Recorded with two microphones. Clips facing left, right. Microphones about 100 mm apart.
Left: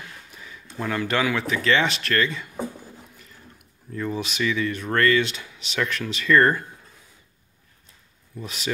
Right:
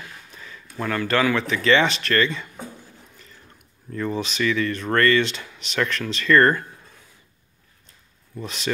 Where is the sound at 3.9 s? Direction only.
5° left (ahead or behind).